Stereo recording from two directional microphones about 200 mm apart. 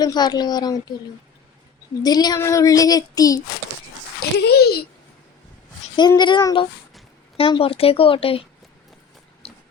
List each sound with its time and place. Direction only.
0.0 s speech: 20° left (ahead or behind)
2.0 s speech: 20° left (ahead or behind)
4.2 s a child's voice: 55° left (ahead or behind)
6.0 s speech: 20° left (ahead or behind)